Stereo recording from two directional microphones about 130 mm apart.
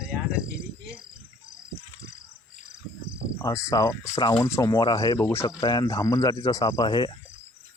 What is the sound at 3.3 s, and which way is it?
Speech, 25° left (ahead or behind).